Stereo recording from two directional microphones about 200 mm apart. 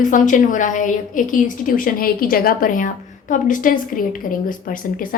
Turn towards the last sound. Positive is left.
turn(degrees=45)  # may be behind; listen again after turning